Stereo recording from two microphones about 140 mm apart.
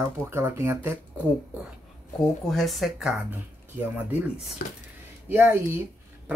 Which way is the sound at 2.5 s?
Centre (ahead or behind).